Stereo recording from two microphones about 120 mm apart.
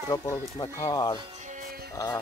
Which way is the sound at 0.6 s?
35° left (ahead or behind).